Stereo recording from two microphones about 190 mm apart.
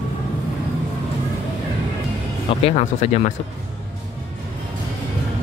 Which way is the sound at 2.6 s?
35° left (ahead or behind).